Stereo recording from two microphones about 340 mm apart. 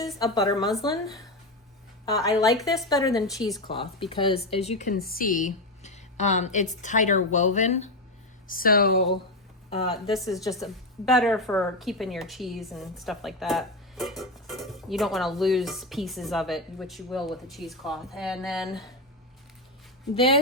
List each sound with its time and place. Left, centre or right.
0.2 s speech: centre; by 9.1 s left
10.4 s a woman's voice: centre
20.1 s speech: centre